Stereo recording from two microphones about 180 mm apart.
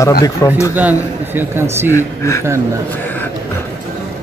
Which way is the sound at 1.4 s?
15° right (ahead or behind).